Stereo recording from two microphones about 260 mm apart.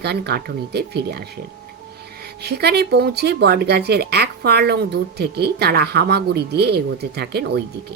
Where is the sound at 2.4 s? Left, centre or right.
Right.